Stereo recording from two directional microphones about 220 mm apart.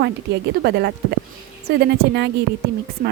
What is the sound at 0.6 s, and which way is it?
Speech, 50° right (ahead or behind).